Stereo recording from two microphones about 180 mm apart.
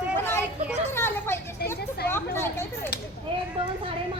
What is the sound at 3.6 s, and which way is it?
Speech, 30° right (ahead or behind).